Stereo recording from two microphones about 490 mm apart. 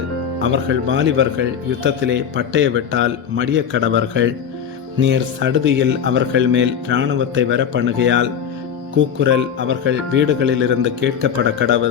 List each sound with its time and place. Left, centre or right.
0.4 s speech: right